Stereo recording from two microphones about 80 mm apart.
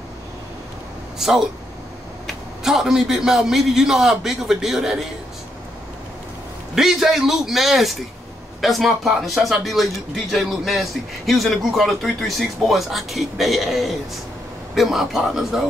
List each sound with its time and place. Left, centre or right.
2.2 s a man's voice: centre
6.7 s a man's voice: centre